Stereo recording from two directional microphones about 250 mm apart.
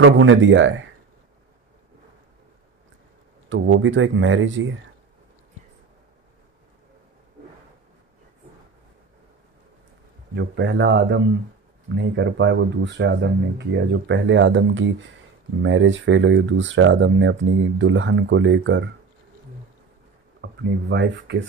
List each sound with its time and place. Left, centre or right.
0.0 s speech: right
3.4 s speech: right
10.3 s speech: right
20.3 s speech: right